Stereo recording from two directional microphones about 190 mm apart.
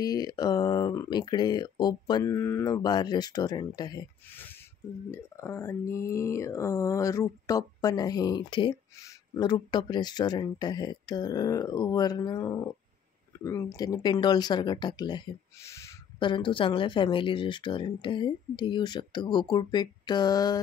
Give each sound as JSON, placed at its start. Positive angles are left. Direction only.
{"t": 0.0, "sound": "speech", "side_deg": 20}
{"t": 4.3, "sound": "a sound", "side_deg": 10}
{"t": 5.1, "sound": "speech", "side_deg": 15}